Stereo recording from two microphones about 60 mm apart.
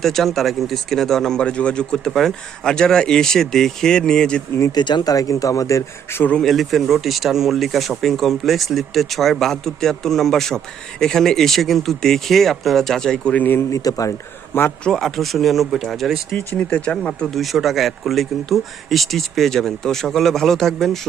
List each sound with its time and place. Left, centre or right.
0.0 s speech: centre
5.0 s a man's voice: left
6.3 s speech: centre
13.3 s speech: left
13.7 s speech: left
14.5 s speech: left
14.9 s speech: centre
16.6 s speech: left
17.3 s speech: centre